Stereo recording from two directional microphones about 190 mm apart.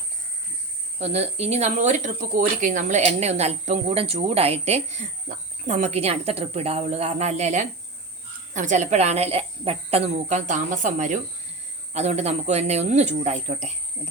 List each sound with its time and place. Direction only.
0.9 s speech: 35° right (ahead or behind)